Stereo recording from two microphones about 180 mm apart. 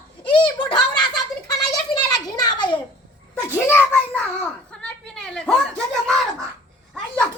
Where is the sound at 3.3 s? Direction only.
10° left (ahead or behind).